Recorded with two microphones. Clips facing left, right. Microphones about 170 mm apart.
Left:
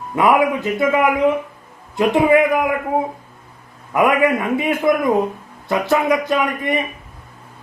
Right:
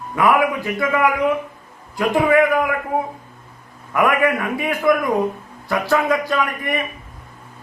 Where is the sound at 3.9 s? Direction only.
20° left (ahead or behind).